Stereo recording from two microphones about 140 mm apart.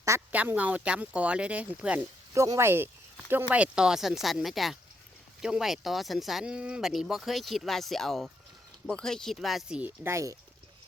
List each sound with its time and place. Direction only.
0.0 s speech: 15° right (ahead or behind)
2.3 s speech: 20° right (ahead or behind)